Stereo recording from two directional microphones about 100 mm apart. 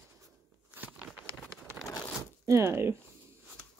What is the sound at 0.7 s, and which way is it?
Walk, 15° right (ahead or behind).